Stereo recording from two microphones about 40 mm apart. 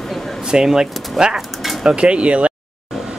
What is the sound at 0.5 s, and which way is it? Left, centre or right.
Speech, centre.